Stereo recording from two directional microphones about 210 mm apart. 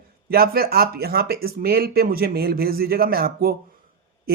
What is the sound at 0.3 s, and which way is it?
Speech, 45° right (ahead or behind).